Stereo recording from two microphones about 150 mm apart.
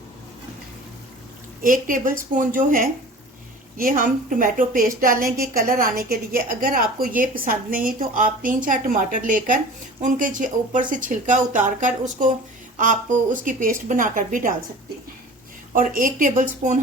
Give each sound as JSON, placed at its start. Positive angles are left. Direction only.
{"t": 1.6, "sound": "a woman's voice", "side_deg": -65}
{"t": 15.7, "sound": "speech", "side_deg": -65}